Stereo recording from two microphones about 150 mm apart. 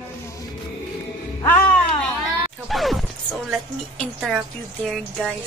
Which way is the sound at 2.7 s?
Centre (ahead or behind).